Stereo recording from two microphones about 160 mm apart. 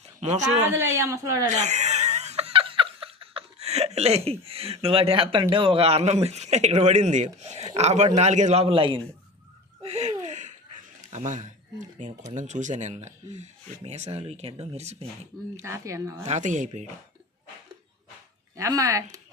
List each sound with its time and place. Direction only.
0.2 s speech: 45° right (ahead or behind)
0.6 s a woman's voice: 15° right (ahead or behind)
1.6 s speech: 45° right (ahead or behind)
9.8 s a sound: 45° right (ahead or behind)
12.3 s speech: 50° right (ahead or behind)
15.6 s a woman's voice: 20° right (ahead or behind)
16.2 s speech: 50° right (ahead or behind)
18.5 s a woman's voice: 20° right (ahead or behind)